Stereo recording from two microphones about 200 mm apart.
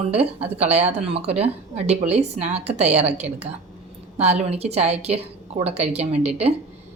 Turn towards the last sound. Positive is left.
turn(degrees=-30)  # may be behind; listen again after turning